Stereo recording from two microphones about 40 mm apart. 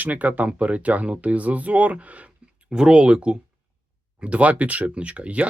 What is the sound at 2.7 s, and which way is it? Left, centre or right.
Speech, right.